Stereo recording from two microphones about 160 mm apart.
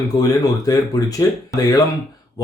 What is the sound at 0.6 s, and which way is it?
Speech, 20° left (ahead or behind).